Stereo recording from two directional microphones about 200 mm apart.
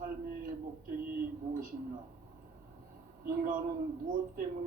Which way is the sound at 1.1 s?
45° right (ahead or behind).